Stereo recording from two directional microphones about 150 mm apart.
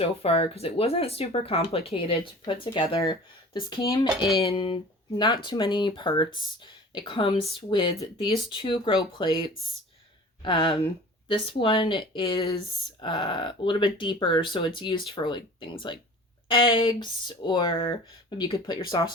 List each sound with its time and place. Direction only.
0.0 s speech: 40° left (ahead or behind)
10.4 s speech: 30° left (ahead or behind)
16.5 s speech: 35° left (ahead or behind)